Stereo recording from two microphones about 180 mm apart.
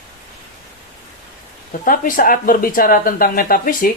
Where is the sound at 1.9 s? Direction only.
50° left (ahead or behind).